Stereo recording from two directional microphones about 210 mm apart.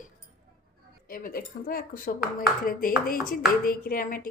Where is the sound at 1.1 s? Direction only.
45° left (ahead or behind).